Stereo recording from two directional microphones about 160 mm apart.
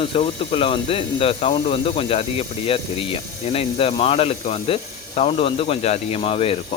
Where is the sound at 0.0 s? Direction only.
35° left (ahead or behind).